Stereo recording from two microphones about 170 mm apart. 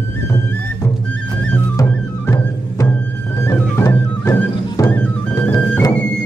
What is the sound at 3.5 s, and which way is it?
Music, 15° left (ahead or behind).